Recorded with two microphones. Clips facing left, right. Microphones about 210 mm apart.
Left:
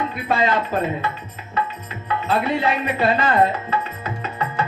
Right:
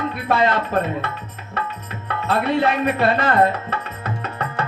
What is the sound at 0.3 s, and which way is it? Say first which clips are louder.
Speech: right 1 dB; 65° right (ahead or behind).